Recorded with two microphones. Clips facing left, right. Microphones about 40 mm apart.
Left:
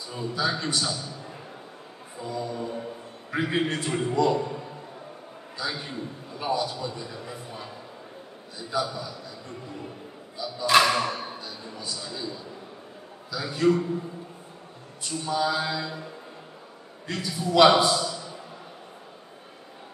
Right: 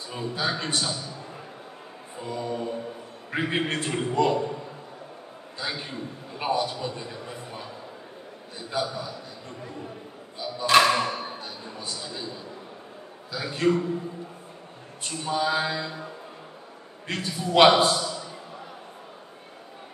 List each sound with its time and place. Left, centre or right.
0.1 s a man's voice: right
2.1 s mantra: right
3.3 s a man's voice: right
5.6 s a man's voice: right
10.3 s a sound: right
10.7 s a sound: centre
11.0 s a sound: right
13.3 s a man's voice: right
15.0 s a man's voice: right
17.1 s a man's voice: right